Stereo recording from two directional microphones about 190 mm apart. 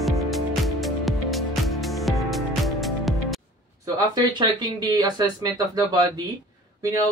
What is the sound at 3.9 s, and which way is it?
Speech, 20° right (ahead or behind).